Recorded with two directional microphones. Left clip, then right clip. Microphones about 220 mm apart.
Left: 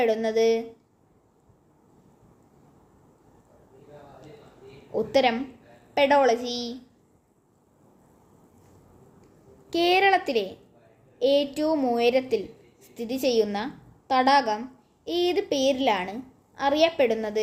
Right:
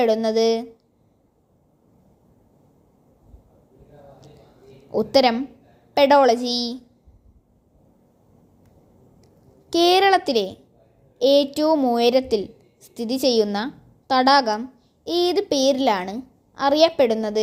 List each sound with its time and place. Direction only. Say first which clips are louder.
0.0 s a woman's voice: right 4 dB; 35° right (ahead or behind)
4.9 s a woman's voice: right 5 dB; 35° right (ahead or behind)
9.2 s a woman's voice: left 1 dB; 35° right (ahead or behind)